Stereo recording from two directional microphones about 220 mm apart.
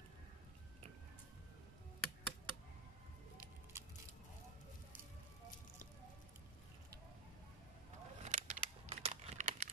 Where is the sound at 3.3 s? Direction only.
10° right (ahead or behind).